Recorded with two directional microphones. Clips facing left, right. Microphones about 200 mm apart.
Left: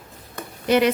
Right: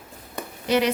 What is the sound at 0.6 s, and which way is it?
Speech, 55° left (ahead or behind).